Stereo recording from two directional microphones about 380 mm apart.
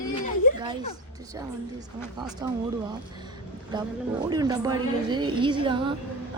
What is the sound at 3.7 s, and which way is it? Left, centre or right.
A woman's voice, centre.